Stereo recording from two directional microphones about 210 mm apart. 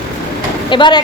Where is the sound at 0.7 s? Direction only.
20° left (ahead or behind).